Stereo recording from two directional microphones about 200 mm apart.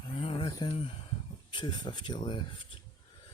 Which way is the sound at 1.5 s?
20° left (ahead or behind).